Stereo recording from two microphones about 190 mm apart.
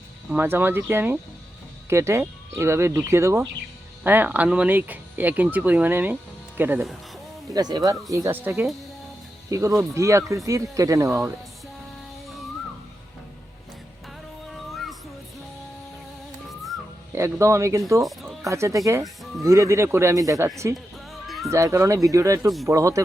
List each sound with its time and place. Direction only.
0.3 s speech: 10° right (ahead or behind)
14.5 s music: centre (ahead or behind)
17.1 s speech: 15° right (ahead or behind)
18.0 s speech: centre (ahead or behind)
18.4 s speech: 15° right (ahead or behind)
21.1 s music: centre (ahead or behind)
21.5 s speech: 15° right (ahead or behind)